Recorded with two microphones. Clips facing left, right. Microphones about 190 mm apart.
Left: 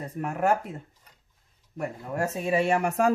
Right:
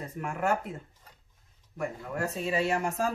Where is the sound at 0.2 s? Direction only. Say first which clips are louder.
Left 5 dB; 40° left (ahead or behind).